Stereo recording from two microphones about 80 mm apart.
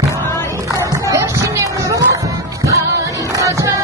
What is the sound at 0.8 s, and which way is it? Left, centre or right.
Music, right.